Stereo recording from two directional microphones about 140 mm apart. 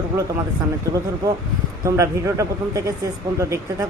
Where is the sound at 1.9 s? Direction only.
20° right (ahead or behind).